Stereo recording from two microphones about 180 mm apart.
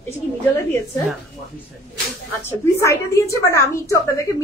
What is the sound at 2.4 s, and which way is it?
A woman's voice, 15° left (ahead or behind).